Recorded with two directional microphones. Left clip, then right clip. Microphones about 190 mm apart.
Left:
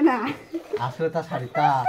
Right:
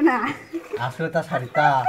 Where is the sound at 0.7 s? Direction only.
55° right (ahead or behind).